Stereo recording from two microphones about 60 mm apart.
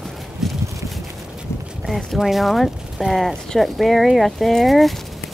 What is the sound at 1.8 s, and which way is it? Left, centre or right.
Speech, centre.